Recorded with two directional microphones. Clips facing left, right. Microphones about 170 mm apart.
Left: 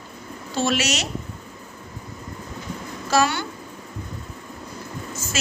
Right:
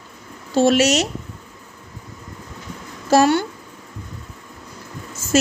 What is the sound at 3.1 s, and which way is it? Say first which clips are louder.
Speech: right 6 dB; 50° right (ahead or behind).